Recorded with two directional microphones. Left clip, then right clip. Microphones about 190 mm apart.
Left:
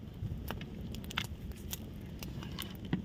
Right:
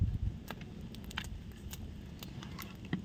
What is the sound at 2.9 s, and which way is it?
Patter, 55° left (ahead or behind).